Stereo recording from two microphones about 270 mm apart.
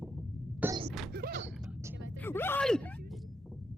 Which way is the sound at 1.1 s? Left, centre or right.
Right.